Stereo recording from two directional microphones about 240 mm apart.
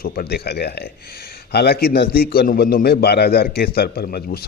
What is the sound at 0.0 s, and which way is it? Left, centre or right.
A man's voice, left.